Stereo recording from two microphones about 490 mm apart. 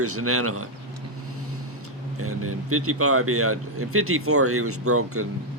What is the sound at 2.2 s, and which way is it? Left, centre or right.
Speech, right.